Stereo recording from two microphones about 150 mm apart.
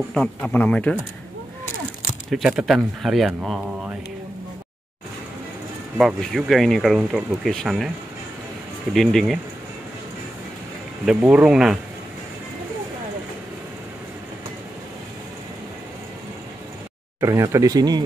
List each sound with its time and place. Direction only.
0.1 s speech: 5° left (ahead or behind)
2.3 s speech: centre (ahead or behind)
5.9 s speech: centre (ahead or behind)
8.9 s speech: centre (ahead or behind)
11.1 s speech: 10° right (ahead or behind)
17.2 s speech: 20° right (ahead or behind)